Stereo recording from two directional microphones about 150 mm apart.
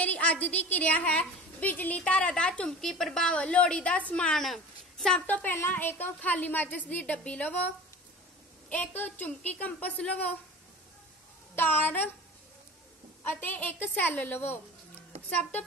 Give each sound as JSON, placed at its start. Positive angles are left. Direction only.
{"t": 0.0, "sound": "a woman's voice", "side_deg": 10}
{"t": 11.5, "sound": "a woman's voice", "side_deg": 10}
{"t": 13.2, "sound": "a woman's voice", "side_deg": 15}